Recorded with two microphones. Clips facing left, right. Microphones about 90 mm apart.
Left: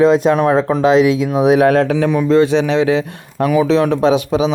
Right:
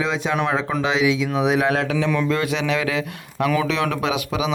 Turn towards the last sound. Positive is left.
turn(degrees=35)  # may be behind; listen again after turning